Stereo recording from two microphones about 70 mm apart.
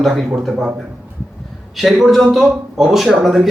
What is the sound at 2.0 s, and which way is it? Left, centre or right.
Speech, centre.